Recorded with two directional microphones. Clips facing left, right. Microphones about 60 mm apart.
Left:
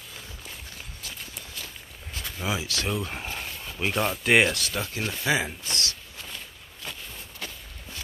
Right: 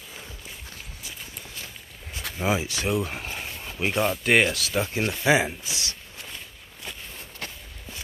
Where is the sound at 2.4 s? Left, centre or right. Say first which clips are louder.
Right 4 dB; right.